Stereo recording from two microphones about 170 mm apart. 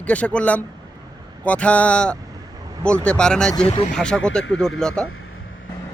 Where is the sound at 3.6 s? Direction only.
35° left (ahead or behind).